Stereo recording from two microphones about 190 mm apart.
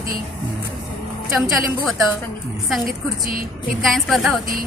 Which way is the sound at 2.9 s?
45° right (ahead or behind).